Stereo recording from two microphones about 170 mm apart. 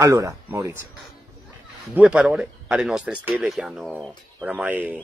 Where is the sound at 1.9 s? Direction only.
5° right (ahead or behind).